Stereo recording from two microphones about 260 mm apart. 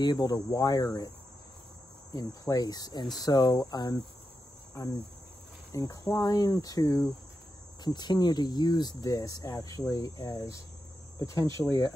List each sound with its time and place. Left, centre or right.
0.0 s speech: centre
2.1 s speech: centre
5.7 s speech: centre
11.1 s cricket: centre
11.5 s speech: centre